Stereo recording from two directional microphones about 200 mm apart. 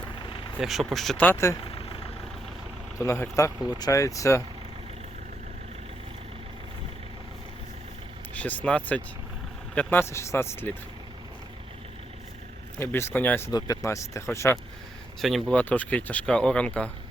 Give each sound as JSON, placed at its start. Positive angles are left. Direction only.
{"t": 0.2, "sound": "vehicle", "side_deg": 25}
{"t": 0.6, "sound": "speech", "side_deg": 0}
{"t": 1.6, "sound": "vehicle", "side_deg": 25}
{"t": 3.0, "sound": "speech", "side_deg": 15}
{"t": 8.3, "sound": "speech", "side_deg": 10}
{"t": 12.8, "sound": "speech", "side_deg": 10}
{"t": 15.2, "sound": "speech", "side_deg": 0}